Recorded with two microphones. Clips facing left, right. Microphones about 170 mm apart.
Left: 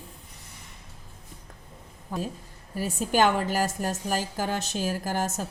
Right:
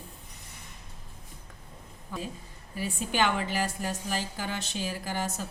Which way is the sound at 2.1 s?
45° left (ahead or behind).